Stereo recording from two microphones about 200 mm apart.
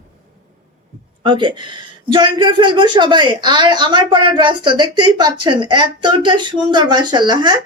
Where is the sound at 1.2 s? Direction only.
25° right (ahead or behind).